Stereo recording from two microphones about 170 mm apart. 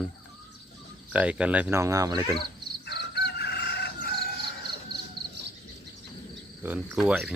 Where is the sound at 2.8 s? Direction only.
80° left.